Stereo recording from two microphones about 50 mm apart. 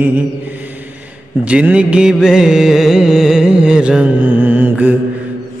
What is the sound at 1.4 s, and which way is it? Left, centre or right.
Music, right.